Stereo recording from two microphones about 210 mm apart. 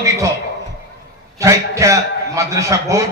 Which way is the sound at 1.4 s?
15° right (ahead or behind).